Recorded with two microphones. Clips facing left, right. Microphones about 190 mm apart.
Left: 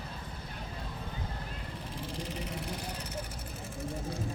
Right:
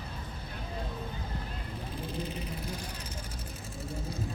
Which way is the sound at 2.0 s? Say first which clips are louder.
Right 1 dB; 85° left.